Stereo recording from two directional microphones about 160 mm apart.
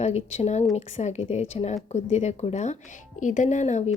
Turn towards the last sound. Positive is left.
turn(degrees=45)  # may be behind; listen again after turning